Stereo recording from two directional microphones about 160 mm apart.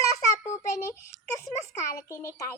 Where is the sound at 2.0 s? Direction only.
20° left (ahead or behind).